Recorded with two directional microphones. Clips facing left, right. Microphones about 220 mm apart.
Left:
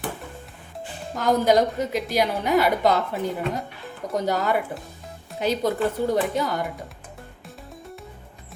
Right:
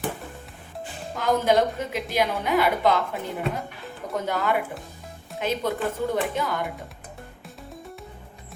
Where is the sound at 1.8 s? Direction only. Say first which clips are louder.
Left 2 dB; 40° left (ahead or behind).